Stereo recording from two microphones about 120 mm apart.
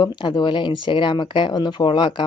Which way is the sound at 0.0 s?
40° left (ahead or behind).